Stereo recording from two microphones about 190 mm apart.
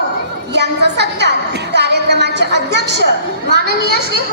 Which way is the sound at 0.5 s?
60° right (ahead or behind).